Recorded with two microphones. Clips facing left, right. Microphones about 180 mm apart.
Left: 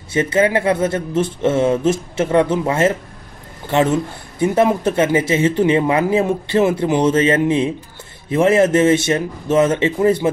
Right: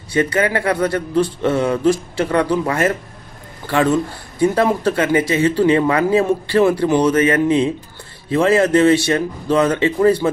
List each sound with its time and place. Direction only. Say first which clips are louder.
0.1 s speech: left 1 dB; 25° left (ahead or behind)